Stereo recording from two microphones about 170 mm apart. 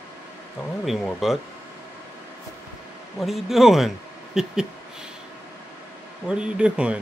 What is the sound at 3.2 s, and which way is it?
A man's voice, centre (ahead or behind).